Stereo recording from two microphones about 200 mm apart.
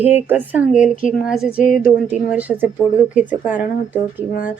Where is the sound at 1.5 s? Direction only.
45° left (ahead or behind).